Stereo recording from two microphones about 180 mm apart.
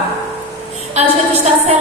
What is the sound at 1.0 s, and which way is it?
Speech, 35° right (ahead or behind).